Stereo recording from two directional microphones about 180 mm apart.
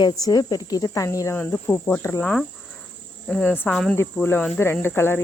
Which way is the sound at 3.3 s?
5° left (ahead or behind).